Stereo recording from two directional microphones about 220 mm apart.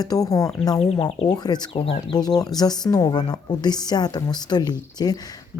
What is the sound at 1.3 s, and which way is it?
Speech, 20° left (ahead or behind).